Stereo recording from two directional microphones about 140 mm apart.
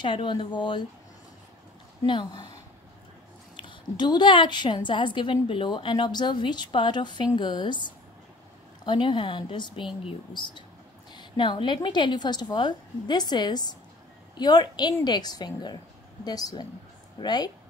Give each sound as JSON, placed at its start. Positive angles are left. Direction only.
{"t": 0.0, "sound": "a woman's voice", "side_deg": 35}
{"t": 2.0, "sound": "a woman's voice", "side_deg": 35}
{"t": 3.5, "sound": "a woman's voice", "side_deg": 35}